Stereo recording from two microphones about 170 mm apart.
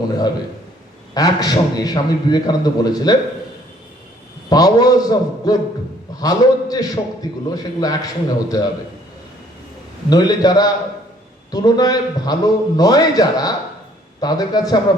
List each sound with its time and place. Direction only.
1.1 s a man's voice: 20° left (ahead or behind)
4.4 s a man's voice: 20° left (ahead or behind)
10.1 s a man's voice: 25° left (ahead or behind)